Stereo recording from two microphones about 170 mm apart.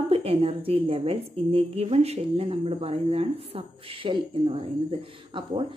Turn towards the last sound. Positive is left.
turn(degrees=-30)  # may be behind; listen again after turning